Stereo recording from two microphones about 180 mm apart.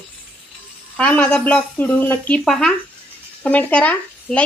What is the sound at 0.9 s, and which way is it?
A woman's voice, 5° left (ahead or behind).